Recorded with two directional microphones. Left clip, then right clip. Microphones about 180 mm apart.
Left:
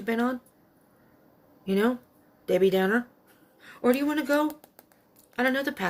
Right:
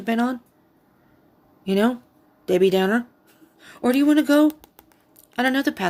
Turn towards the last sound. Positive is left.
turn(degrees=-55)  # may be behind; listen again after turning